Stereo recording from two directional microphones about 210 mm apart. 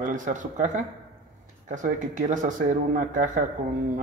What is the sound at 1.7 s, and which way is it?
Speech, 40° right (ahead or behind).